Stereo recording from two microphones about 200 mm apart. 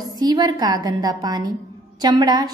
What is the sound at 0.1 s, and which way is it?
A woman's voice, 20° right (ahead or behind).